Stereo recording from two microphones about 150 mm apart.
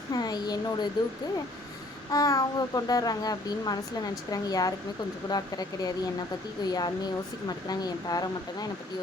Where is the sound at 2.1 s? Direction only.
25° left (ahead or behind).